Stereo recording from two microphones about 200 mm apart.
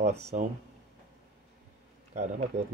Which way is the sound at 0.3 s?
40° right (ahead or behind).